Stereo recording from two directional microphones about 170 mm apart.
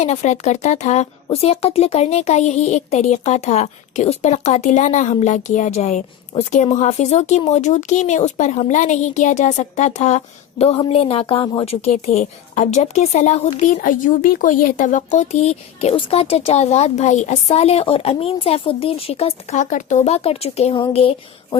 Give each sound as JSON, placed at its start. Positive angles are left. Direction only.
{"t": 0.0, "sound": "speech", "side_deg": 40}